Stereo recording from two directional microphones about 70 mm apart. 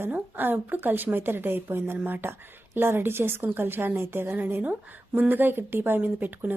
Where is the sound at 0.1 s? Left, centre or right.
Right.